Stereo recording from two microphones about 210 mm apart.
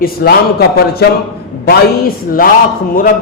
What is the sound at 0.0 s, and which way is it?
Speech, 45° left (ahead or behind).